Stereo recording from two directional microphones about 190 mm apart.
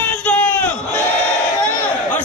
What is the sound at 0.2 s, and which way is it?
Crowd, 10° left (ahead or behind).